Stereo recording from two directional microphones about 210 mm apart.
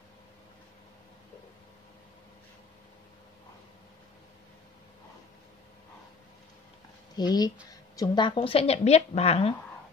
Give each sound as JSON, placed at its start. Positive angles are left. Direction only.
{"t": 7.2, "sound": "a woman's voice", "side_deg": 20}